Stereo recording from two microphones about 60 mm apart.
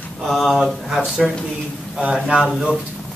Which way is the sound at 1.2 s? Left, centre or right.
Centre.